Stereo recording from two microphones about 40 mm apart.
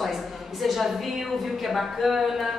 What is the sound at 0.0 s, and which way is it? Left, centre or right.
Speech, centre.